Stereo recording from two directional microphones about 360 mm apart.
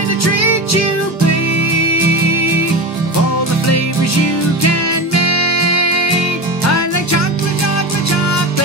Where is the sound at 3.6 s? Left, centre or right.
Left.